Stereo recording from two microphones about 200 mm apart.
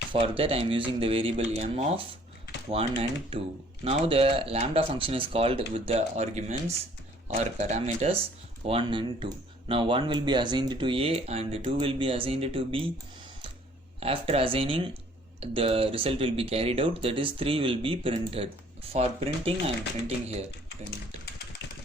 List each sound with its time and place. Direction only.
0.1 s speech: 25° right (ahead or behind)
14.0 s speech: 30° right (ahead or behind)